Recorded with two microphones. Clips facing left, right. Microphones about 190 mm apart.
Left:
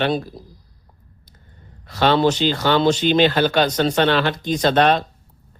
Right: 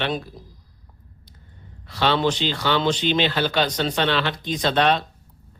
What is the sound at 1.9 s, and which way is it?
Speech, 45° left (ahead or behind).